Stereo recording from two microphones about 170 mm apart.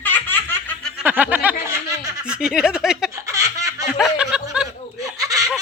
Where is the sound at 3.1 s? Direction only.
20° right (ahead or behind).